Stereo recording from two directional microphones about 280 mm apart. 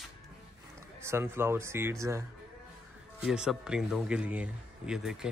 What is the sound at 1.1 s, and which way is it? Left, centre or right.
Speech, centre.